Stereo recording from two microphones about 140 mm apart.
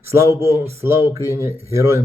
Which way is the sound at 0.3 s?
20° right (ahead or behind).